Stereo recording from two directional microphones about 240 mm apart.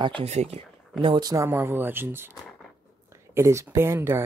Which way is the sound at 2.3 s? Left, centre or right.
Centre.